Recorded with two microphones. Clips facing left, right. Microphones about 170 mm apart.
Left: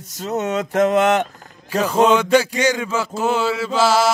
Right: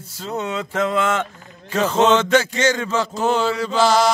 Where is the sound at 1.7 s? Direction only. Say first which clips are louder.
Left 1 dB; 10° left (ahead or behind).